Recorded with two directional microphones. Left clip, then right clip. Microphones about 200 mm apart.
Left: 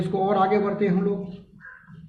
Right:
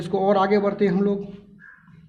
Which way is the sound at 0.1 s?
50° right (ahead or behind).